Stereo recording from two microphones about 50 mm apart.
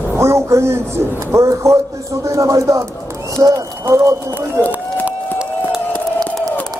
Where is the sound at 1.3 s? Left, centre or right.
Right.